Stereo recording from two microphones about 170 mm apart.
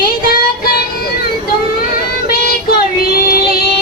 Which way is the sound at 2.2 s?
65° left (ahead or behind).